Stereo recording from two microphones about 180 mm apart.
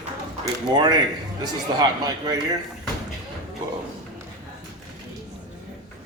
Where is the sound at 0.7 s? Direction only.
25° right (ahead or behind).